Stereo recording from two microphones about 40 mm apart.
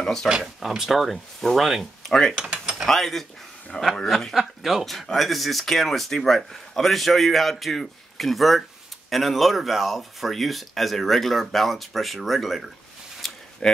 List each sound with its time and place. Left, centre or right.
0.0 s speech: centre
0.4 s speech: centre
2.0 s mechanisms: centre
2.6 s a sound: centre
2.9 s speech: centre
3.7 s speech: left
4.3 s speech: centre
13.2 s a sound: centre